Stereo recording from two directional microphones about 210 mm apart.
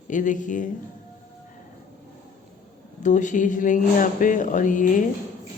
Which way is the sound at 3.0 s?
35° left (ahead or behind).